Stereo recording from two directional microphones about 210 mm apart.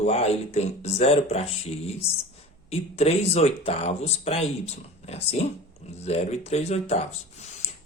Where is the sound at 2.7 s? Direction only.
30° left (ahead or behind).